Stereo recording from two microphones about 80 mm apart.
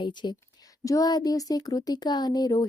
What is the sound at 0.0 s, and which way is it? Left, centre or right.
Speech, left.